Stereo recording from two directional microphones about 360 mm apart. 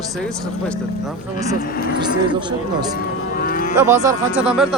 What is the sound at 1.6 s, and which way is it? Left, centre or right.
Speech, left.